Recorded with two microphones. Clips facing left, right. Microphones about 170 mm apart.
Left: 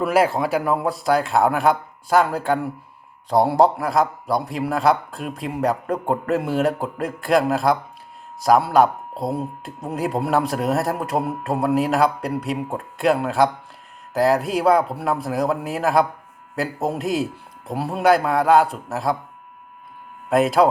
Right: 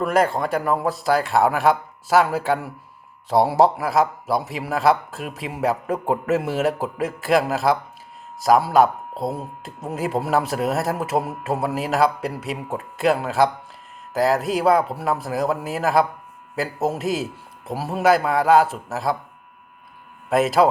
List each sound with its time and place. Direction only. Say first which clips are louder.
0.0 s speech: left 1 dB; 5° left (ahead or behind)
20.3 s speech: left 1 dB; centre (ahead or behind)